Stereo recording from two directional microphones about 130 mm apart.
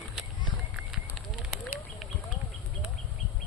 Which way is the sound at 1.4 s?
Centre (ahead or behind).